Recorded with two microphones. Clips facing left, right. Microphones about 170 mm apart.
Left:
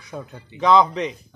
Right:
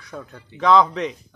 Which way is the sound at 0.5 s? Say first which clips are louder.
Even; centre (ahead or behind).